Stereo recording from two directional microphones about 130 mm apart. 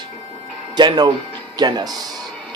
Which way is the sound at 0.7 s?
35° right (ahead or behind).